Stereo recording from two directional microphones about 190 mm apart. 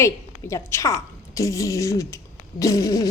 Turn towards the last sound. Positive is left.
turn(degrees=20)  # may be behind; listen again after turning